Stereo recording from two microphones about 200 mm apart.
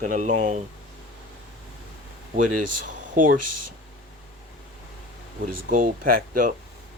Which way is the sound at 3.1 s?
45° right (ahead or behind).